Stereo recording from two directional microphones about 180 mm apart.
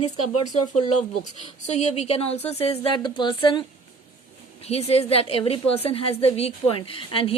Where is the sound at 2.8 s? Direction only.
25° left (ahead or behind).